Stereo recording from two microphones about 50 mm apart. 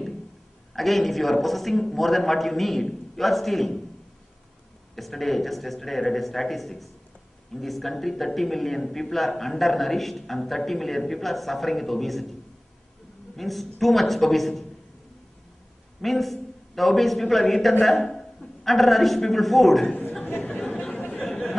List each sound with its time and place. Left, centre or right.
0.7 s a man's voice: centre
4.9 s a man's voice: centre
13.4 s a man's voice: centre
16.0 s a man's voice: centre
19.9 s a sound: left
20.3 s chatter: left